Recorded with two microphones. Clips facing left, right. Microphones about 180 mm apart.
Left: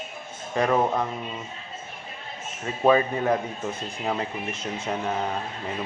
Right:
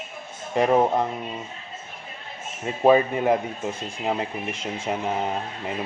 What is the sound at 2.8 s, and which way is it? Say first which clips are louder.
Speech: right 2 dB; 15° right (ahead or behind).